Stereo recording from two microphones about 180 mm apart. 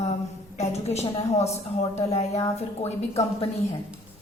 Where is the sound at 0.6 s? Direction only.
35° left (ahead or behind).